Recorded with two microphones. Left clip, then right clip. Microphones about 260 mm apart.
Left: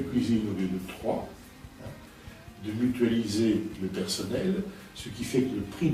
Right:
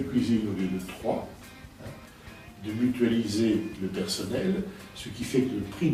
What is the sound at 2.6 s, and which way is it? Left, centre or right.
Speech, centre.